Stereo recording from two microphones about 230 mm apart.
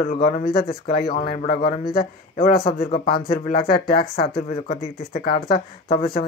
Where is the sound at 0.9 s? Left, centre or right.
Left.